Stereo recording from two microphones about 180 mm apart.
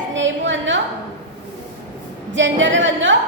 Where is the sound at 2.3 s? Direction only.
90° right.